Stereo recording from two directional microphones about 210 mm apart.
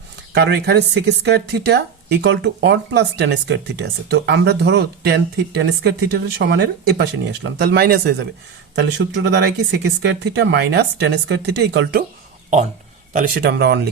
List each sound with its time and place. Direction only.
0.3 s speech: 55° right (ahead or behind)
13.1 s speech: 45° right (ahead or behind)